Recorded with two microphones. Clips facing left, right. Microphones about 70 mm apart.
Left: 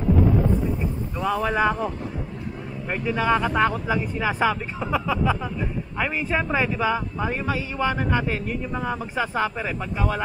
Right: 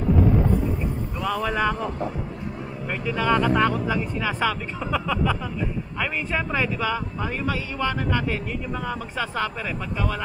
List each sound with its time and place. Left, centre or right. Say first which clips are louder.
1.2 s speech: left 2 dB; centre
2.9 s a man's voice: left 1 dB; centre